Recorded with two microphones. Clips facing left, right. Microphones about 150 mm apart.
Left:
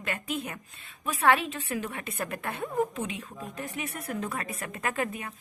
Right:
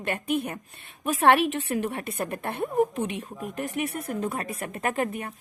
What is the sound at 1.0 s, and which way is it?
Speech, 80° right.